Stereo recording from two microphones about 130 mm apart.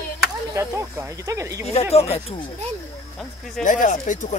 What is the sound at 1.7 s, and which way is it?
Speech, 55° left (ahead or behind).